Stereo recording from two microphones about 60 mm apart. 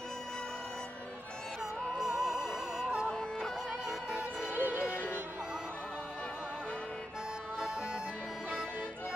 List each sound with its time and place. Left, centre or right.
2.0 s music: centre
3.1 s music: centre
4.5 s music: right